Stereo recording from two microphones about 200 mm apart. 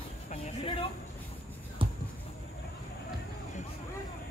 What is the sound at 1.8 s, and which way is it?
Basketball bounce, 25° right (ahead or behind).